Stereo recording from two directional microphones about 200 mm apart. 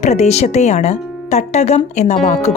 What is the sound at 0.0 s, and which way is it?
Speech, 35° left (ahead or behind).